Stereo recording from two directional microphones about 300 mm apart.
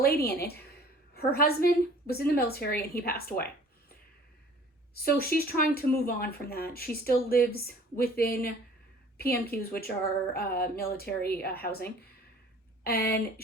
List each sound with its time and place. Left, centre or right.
0.0 s a woman's voice: left
5.1 s a woman's voice: left